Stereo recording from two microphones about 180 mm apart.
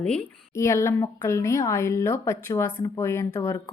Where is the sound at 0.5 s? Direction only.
15° left (ahead or behind).